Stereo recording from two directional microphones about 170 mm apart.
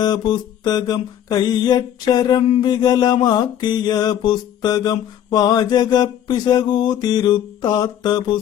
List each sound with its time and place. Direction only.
0.0 s mantra: 25° left (ahead or behind)